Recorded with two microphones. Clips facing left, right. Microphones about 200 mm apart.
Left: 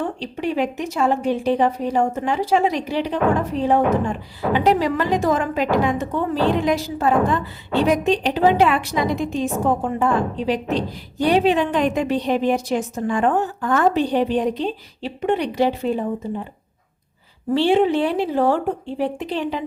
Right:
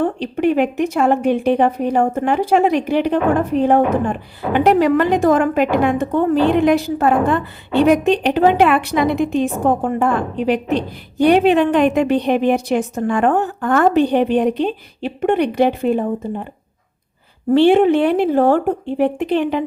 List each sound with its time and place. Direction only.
0.0 s speech: 55° right (ahead or behind)
17.5 s speech: 55° right (ahead or behind)